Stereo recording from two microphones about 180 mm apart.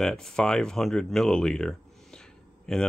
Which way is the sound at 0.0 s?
5° left (ahead or behind).